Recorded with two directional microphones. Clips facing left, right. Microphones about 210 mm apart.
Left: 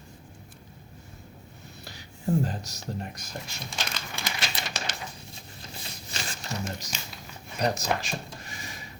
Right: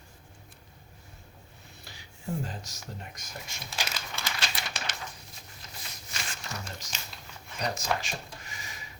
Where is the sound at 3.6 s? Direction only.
5° right (ahead or behind).